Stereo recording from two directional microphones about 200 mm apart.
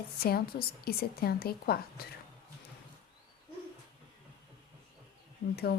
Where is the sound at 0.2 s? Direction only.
50° left (ahead or behind).